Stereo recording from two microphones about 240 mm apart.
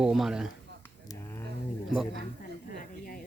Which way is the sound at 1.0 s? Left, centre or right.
Centre.